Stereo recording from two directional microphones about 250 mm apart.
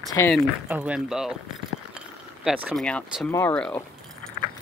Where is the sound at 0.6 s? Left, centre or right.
Centre.